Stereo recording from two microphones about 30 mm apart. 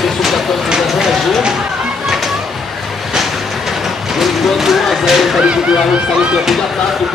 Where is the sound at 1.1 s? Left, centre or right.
Centre.